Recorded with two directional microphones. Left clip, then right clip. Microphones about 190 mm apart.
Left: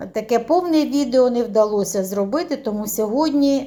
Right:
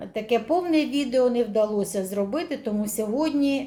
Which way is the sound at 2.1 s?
20° left (ahead or behind).